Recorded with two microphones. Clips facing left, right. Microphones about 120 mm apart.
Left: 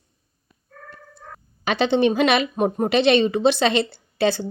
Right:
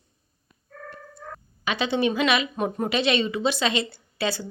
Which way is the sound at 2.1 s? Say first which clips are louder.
Left 4 dB; 55° left (ahead or behind).